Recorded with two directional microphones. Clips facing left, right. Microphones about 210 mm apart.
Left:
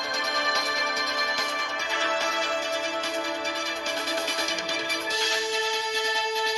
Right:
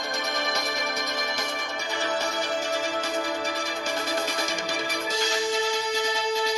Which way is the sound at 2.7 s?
40° right (ahead or behind).